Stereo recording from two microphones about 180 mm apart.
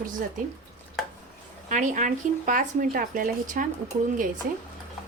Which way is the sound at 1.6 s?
45° right (ahead or behind).